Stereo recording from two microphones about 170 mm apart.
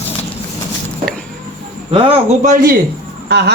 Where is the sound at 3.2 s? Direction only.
75° right (ahead or behind).